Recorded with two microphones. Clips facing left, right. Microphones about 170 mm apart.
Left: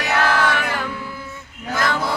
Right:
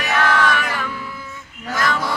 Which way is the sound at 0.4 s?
30° left (ahead or behind).